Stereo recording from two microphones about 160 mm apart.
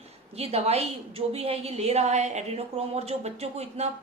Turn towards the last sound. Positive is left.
turn(degrees=-40)  # may be behind; listen again after turning